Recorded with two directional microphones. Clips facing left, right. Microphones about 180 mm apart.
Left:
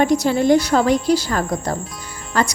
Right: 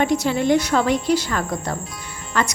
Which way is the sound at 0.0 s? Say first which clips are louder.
Left 3 dB; 40° left (ahead or behind).